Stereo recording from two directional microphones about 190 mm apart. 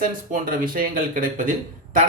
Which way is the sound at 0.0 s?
45° right (ahead or behind).